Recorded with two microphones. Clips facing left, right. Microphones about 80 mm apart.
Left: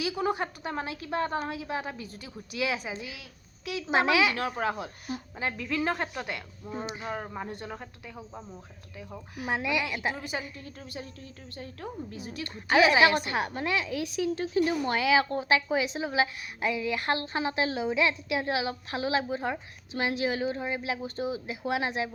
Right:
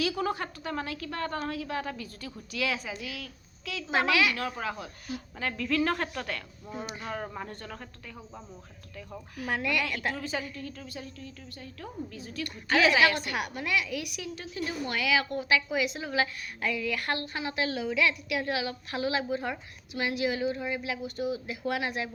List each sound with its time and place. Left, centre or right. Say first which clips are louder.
0.0 s a woman's voice: left 1 dB; centre
5.4 s a woman's voice: right 2 dB; centre
9.3 s a woman's voice: left 1 dB; centre; by 11.9 s left
12.1 s a woman's voice: even; centre